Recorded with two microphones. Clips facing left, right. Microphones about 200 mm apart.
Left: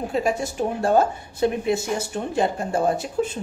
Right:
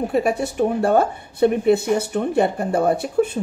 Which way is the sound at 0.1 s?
60° right (ahead or behind).